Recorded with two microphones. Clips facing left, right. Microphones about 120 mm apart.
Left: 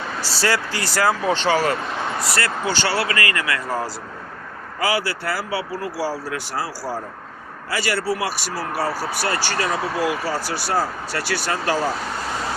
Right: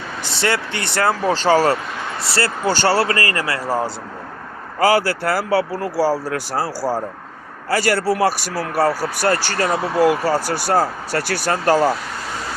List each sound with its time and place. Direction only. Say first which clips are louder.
0.3 s speech: right 1 dB; 25° right (ahead or behind)
1.4 s speech: right 4 dB; 40° right (ahead or behind)
2.2 s speech: right 6 dB; 30° right (ahead or behind)
2.6 s speech: right 7 dB; 45° right (ahead or behind)
4.8 s speech: right 7 dB; 45° right (ahead or behind)